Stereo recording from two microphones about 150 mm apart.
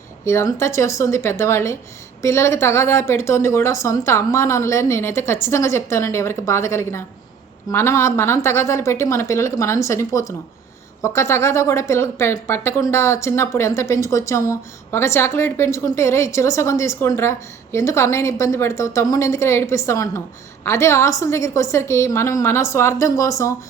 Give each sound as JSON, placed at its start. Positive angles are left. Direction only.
{"t": 0.3, "sound": "speech", "side_deg": 20}